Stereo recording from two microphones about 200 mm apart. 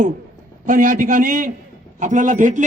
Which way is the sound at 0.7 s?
40° right (ahead or behind).